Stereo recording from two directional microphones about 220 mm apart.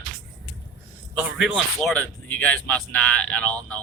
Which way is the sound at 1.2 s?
5° right (ahead or behind).